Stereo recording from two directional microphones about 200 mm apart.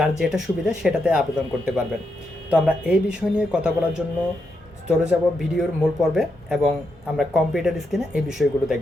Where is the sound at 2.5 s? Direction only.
5° right (ahead or behind).